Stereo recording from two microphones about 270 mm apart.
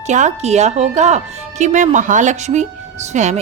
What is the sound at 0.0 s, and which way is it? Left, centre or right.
Speech, right.